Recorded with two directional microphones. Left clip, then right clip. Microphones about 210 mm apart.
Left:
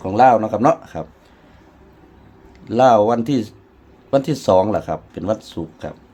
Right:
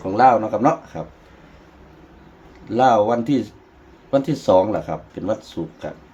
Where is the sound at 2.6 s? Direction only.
50° left (ahead or behind).